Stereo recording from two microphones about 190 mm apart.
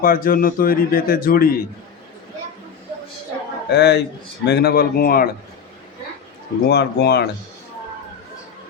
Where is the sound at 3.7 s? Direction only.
60° left (ahead or behind).